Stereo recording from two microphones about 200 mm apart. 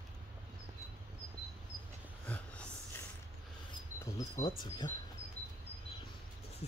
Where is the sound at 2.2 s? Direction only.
5° left (ahead or behind).